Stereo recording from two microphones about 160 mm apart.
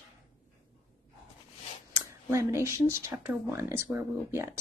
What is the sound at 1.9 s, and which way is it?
Speech, 15° right (ahead or behind).